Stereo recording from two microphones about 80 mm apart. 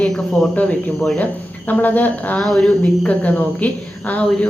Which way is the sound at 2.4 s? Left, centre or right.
Centre.